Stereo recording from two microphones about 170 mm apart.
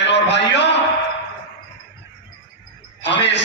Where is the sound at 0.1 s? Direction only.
90° left.